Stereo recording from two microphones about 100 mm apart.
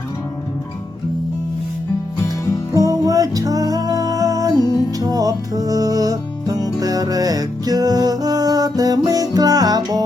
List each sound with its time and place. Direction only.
2.7 s music: 35° right (ahead or behind)